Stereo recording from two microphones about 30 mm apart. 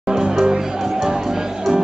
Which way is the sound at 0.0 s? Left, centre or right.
Right.